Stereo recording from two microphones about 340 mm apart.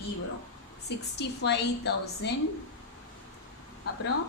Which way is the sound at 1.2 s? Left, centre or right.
Left.